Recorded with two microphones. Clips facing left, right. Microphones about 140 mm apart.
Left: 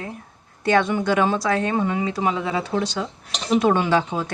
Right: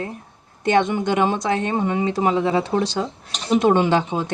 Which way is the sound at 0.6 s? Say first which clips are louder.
Right 1 dB; 20° right (ahead or behind).